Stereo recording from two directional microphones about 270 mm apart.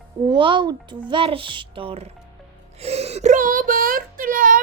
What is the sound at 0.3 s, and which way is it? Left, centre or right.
A child's voice, centre.